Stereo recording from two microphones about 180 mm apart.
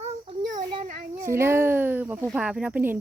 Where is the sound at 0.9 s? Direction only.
45° right (ahead or behind).